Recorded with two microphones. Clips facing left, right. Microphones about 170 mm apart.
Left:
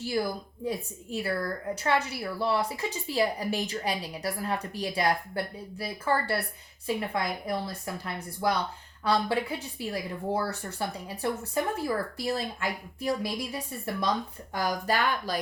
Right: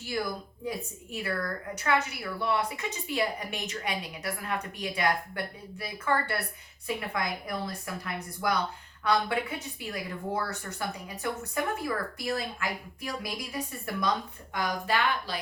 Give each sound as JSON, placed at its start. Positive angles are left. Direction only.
{"t": 1.1, "sound": "a woman's voice", "side_deg": 30}
{"t": 14.5, "sound": "a woman's voice", "side_deg": 40}